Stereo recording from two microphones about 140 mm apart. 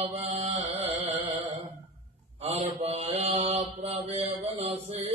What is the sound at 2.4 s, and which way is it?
Mantra, 45° right (ahead or behind).